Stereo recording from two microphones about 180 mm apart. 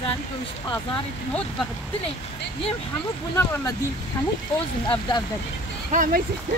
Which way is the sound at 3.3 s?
15° left (ahead or behind).